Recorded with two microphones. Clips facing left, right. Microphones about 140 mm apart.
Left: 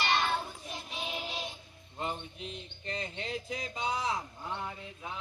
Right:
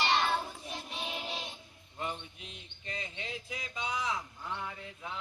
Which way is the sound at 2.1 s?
35° left (ahead or behind).